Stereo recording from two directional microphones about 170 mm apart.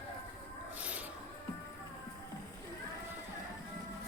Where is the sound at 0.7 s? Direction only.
10° right (ahead or behind).